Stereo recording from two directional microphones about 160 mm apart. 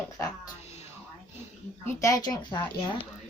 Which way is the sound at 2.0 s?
20° left (ahead or behind).